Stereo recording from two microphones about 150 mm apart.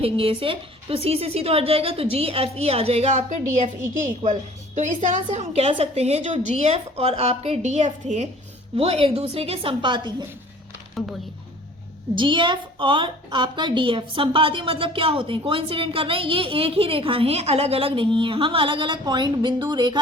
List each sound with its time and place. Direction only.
0.0 s a woman's voice: 40° right (ahead or behind)
12.1 s a woman's voice: 35° right (ahead or behind)